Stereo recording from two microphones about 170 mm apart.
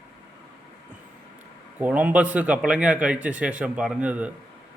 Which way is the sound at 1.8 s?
10° right (ahead or behind).